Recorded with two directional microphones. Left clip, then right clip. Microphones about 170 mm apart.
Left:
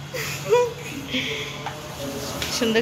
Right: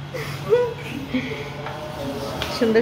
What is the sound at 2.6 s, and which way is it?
Speech, 5° right (ahead or behind).